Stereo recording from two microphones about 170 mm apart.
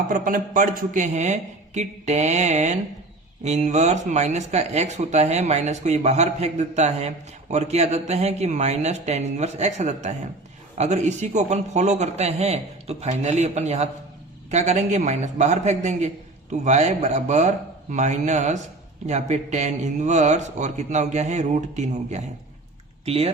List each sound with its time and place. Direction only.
0.1 s a man's voice: 55° right (ahead or behind); by 23.3 s 35° right (ahead or behind)